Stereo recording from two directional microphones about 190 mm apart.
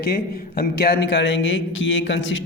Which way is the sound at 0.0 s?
55° left (ahead or behind).